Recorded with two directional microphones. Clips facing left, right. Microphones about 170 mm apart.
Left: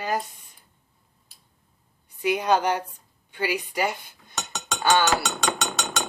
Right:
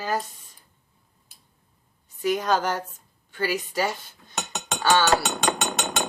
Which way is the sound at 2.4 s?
20° left (ahead or behind).